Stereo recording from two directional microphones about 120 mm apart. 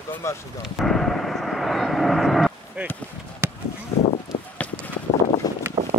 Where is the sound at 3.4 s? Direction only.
20° right (ahead or behind).